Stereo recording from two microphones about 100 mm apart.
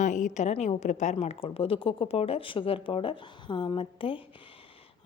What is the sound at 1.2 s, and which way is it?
Speech, 80° left.